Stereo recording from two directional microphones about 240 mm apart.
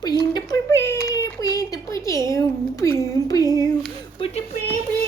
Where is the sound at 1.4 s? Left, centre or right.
Centre.